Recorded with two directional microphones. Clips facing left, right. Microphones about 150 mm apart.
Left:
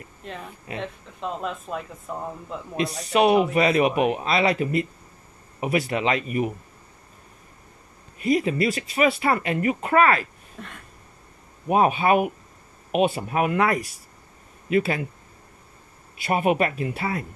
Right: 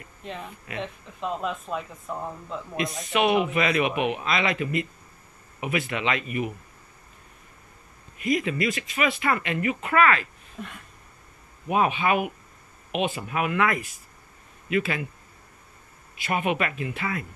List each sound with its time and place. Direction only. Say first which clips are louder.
0.2 s speech: even; centre (ahead or behind)
2.8 s speech: left 4 dB; 35° left (ahead or behind)
8.2 s speech: left 4 dB; 35° left (ahead or behind)
11.6 s speech: left 4 dB; 40° left (ahead or behind)
16.3 s speech: left 4 dB; 40° left (ahead or behind)